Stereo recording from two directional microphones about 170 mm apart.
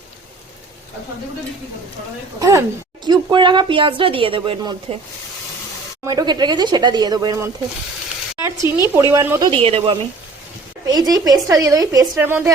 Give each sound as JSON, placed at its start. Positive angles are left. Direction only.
{"t": 2.4, "sound": "a woman's voice", "side_deg": -20}
{"t": 6.1, "sound": "a woman's voice", "side_deg": -25}
{"t": 9.5, "sound": "a woman's voice", "side_deg": -35}